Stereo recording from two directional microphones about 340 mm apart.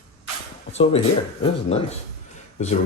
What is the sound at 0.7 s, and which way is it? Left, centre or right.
Speech, centre.